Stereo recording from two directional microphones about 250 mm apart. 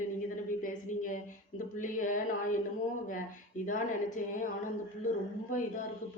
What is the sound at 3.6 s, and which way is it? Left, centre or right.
Speech, left.